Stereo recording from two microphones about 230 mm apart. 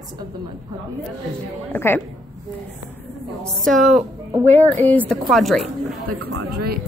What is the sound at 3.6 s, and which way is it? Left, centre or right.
A woman's voice, centre.